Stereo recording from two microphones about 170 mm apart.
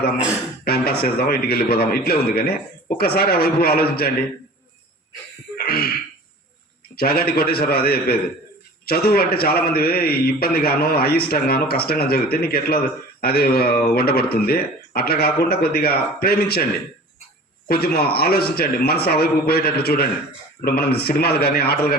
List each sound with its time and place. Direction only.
0.6 s a man's voice: 65° left (ahead or behind)
5.5 s throat clearing: 65° left (ahead or behind)
6.9 s a man's voice: 65° left (ahead or behind)
17.7 s a man's voice: 65° left (ahead or behind)